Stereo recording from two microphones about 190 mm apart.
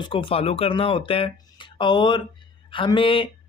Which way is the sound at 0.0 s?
25° left (ahead or behind).